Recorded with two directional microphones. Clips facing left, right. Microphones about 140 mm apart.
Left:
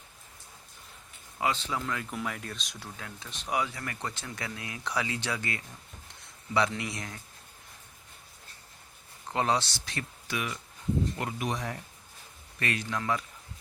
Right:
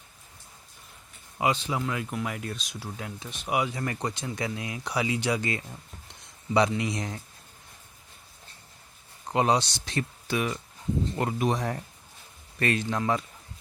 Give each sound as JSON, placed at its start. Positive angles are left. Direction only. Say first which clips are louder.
{"t": 1.4, "sound": "speech", "louder": "right 4 dB", "side_deg": -15}
{"t": 3.0, "sound": "speech", "louder": "right 5 dB", "side_deg": -15}
{"t": 9.3, "sound": "speech", "louder": "right 4 dB", "side_deg": -15}